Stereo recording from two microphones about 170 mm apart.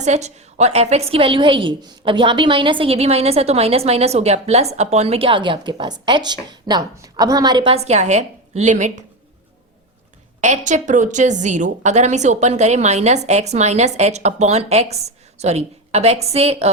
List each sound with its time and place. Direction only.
0.0 s a woman's voice: 40° right (ahead or behind)
10.4 s a woman's voice: 45° right (ahead or behind)